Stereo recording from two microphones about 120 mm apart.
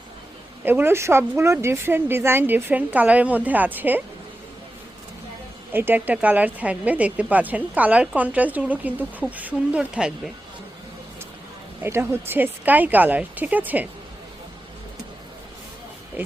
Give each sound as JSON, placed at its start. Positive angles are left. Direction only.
{"t": 0.6, "sound": "speech", "side_deg": -15}
{"t": 5.7, "sound": "speech", "side_deg": -15}
{"t": 11.8, "sound": "speech", "side_deg": -20}
{"t": 16.2, "sound": "speech", "side_deg": -20}